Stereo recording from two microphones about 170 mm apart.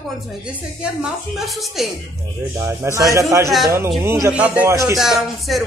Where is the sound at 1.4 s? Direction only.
Centre (ahead or behind).